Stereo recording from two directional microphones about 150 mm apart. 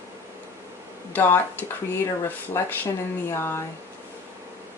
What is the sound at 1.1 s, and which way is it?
Speech, 10° left (ahead or behind).